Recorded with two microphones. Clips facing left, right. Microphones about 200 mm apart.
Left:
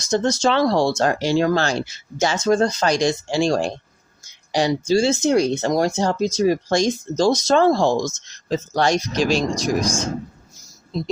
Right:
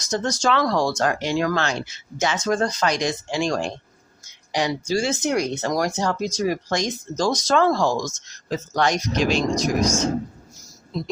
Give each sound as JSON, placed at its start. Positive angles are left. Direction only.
{"t": 0.0, "sound": "speech", "side_deg": 30}
{"t": 10.9, "sound": "speech", "side_deg": 25}